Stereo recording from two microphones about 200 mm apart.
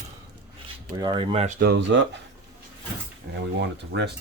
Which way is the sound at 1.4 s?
50° right (ahead or behind).